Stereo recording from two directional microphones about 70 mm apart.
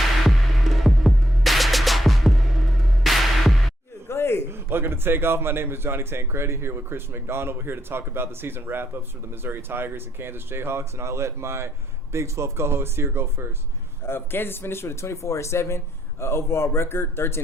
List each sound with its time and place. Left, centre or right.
0.3 s music: centre
4.1 s a sound: left
4.5 s a man's voice: right
14.0 s speech: left